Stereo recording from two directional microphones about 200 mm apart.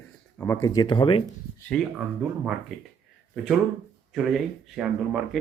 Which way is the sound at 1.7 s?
5° right (ahead or behind).